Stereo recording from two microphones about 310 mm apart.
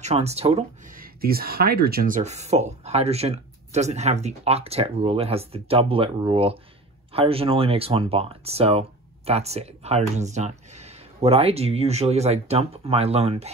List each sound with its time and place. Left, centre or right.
0.0 s speech: centre